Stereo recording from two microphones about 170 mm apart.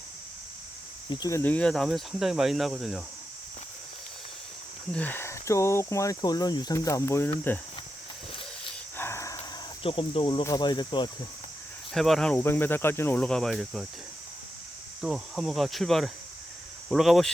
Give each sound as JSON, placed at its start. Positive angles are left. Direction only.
{"t": 1.1, "sound": "speech", "side_deg": 20}
{"t": 4.9, "sound": "speech", "side_deg": 10}
{"t": 9.0, "sound": "a sound", "side_deg": 15}
{"t": 9.8, "sound": "speech", "side_deg": 30}
{"t": 11.9, "sound": "speech", "side_deg": 0}
{"t": 15.0, "sound": "speech", "side_deg": 0}